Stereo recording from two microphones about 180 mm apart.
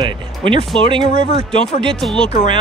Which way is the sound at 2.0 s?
Centre (ahead or behind).